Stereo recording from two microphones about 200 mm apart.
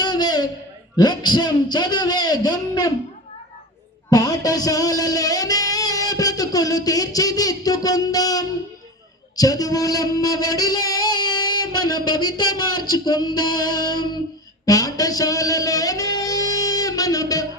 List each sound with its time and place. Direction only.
0.0 s a sound: 20° left (ahead or behind)
0.9 s a man's voice: 20° left (ahead or behind)
4.1 s music: 20° left (ahead or behind)
9.3 s a sound: 20° left (ahead or behind)
12.9 s a man's voice: 20° left (ahead or behind)
14.6 s music: 15° left (ahead or behind)